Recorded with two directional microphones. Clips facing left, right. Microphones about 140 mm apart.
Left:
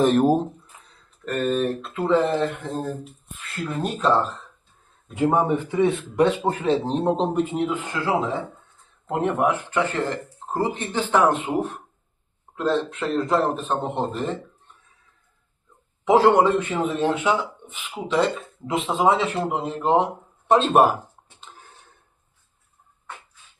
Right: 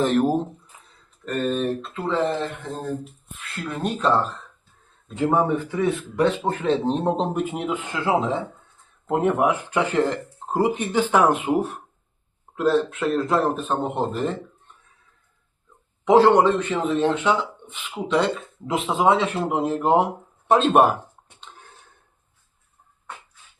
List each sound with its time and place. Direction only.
0.0 s speech: 15° left (ahead or behind)
0.9 s a man's voice: centre (ahead or behind)
5.0 s speech: 15° left (ahead or behind)
6.8 s a man's voice: centre (ahead or behind)
7.5 s a man's voice: 15° right (ahead or behind)
16.0 s a man's voice: 5° left (ahead or behind)
21.5 s a sound: 5° left (ahead or behind)